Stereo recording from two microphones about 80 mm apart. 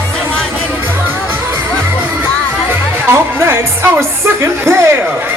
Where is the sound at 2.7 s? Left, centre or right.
Right.